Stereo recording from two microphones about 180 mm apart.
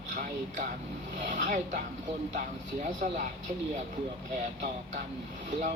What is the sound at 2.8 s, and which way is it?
Speech, 45° right (ahead or behind).